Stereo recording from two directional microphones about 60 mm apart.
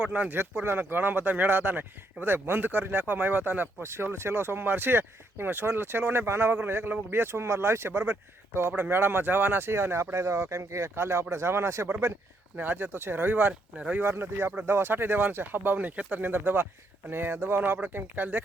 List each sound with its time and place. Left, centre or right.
0.0 s speech: right
0.3 s speech: right
3.8 s speech: right
13.7 s speech: right
14.0 s speech: right